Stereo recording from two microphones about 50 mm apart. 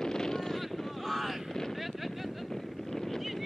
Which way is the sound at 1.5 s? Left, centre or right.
Centre.